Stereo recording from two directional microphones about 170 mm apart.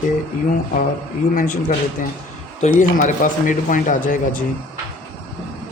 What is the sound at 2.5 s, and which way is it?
A man's voice, 45° left (ahead or behind).